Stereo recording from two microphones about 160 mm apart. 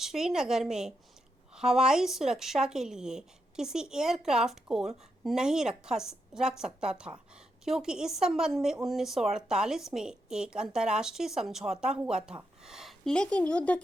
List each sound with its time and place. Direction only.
0.0 s a woman's voice: centre (ahead or behind)